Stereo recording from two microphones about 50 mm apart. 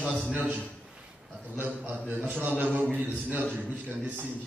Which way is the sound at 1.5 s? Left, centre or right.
Right.